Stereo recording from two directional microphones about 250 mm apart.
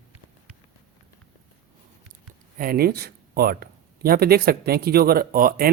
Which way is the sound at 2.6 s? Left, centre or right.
Right.